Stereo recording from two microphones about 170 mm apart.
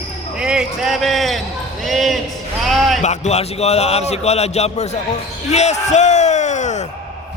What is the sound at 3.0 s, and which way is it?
A man's voice, 45° left (ahead or behind).